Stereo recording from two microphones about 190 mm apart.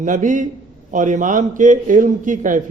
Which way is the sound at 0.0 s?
45° right (ahead or behind).